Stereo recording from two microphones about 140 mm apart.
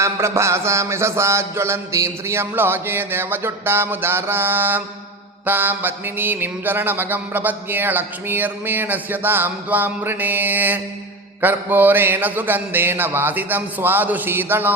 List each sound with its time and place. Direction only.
0.0 s mantra: 20° right (ahead or behind)